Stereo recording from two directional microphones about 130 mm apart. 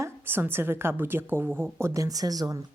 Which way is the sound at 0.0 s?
15° right (ahead or behind).